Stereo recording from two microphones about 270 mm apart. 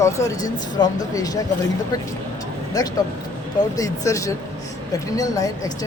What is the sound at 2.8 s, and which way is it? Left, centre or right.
Speech, centre.